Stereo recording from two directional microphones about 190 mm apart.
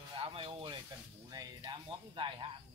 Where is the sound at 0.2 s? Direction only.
30° right (ahead or behind).